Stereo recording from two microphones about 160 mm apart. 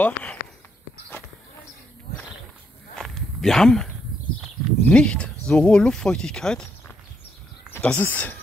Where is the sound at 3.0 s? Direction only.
Centre (ahead or behind).